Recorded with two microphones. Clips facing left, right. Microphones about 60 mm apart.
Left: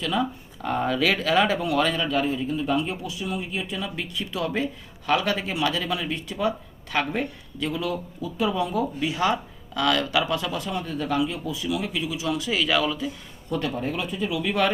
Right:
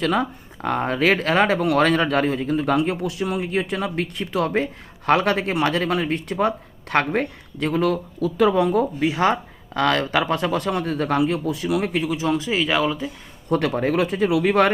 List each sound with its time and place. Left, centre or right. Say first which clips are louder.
0.0 s speech: right 4 dB; right
13.5 s speech: right 7 dB; right